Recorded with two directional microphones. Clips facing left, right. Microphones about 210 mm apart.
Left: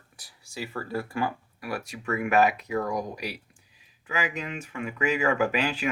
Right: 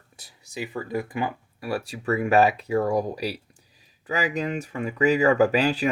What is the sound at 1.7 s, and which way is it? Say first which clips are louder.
Speech: right 5 dB; 30° right (ahead or behind).